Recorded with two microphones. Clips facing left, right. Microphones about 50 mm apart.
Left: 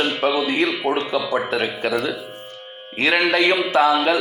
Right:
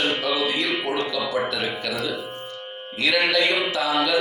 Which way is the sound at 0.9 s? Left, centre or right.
Left.